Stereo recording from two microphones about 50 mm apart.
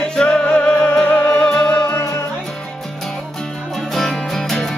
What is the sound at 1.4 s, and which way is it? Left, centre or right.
Music, centre.